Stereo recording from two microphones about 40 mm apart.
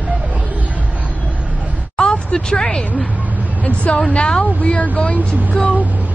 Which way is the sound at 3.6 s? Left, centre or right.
Left.